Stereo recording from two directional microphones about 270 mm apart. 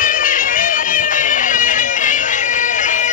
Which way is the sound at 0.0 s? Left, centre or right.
Left.